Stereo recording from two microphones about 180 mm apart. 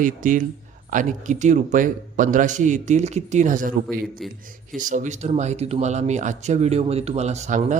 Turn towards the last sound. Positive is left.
turn(degrees=-40)  # may be behind; listen again after turning